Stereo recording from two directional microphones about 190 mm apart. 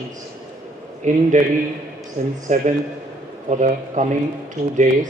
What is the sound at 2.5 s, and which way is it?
A man's voice, 40° right (ahead or behind).